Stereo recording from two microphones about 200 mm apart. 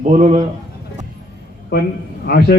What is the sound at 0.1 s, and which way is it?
Speech, 40° right (ahead or behind).